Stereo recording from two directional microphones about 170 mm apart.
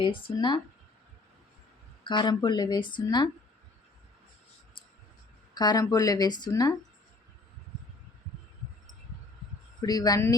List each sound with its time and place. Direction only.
0.0 s speech: 30° left (ahead or behind)
2.0 s speech: 25° left (ahead or behind)
5.5 s speech: 20° left (ahead or behind)
9.8 s speech: 20° left (ahead or behind)